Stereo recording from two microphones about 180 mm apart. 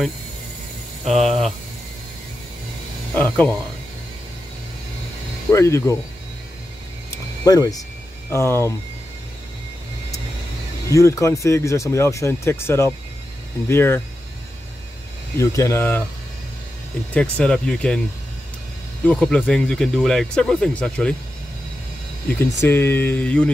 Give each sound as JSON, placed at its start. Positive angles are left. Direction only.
{"t": 1.0, "sound": "speech", "side_deg": 0}
{"t": 3.2, "sound": "speech", "side_deg": 10}
{"t": 5.5, "sound": "speech", "side_deg": 15}
{"t": 7.4, "sound": "speech", "side_deg": 20}
{"t": 10.9, "sound": "speech", "side_deg": 15}
{"t": 15.3, "sound": "speech", "side_deg": 15}
{"t": 17.1, "sound": "speech", "side_deg": 5}
{"t": 19.0, "sound": "speech", "side_deg": 5}
{"t": 22.4, "sound": "speech", "side_deg": 15}